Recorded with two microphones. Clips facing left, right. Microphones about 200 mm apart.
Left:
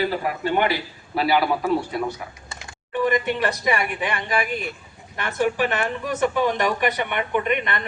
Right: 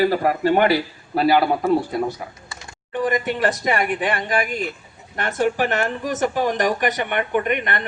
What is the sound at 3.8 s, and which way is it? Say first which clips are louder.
Speech: right 4 dB; 50° right (ahead or behind).